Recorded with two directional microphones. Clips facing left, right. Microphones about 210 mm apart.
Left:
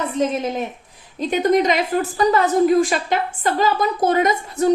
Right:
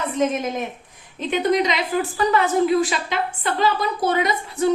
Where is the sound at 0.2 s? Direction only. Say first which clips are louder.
Even; 30° left (ahead or behind).